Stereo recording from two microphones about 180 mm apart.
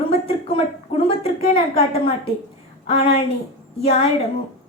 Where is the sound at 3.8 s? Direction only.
40° left (ahead or behind).